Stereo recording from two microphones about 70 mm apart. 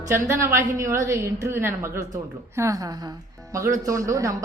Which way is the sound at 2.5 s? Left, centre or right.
Right.